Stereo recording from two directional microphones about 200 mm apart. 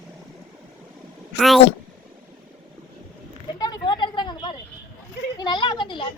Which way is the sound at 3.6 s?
20° left (ahead or behind).